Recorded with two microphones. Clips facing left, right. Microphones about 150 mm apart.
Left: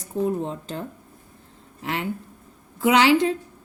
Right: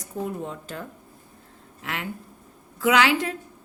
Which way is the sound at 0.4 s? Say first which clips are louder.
Left 3 dB; 30° left (ahead or behind).